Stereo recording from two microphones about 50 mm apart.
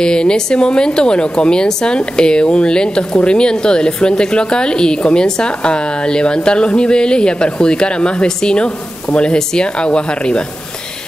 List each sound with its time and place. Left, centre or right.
0.0 s a woman's voice: centre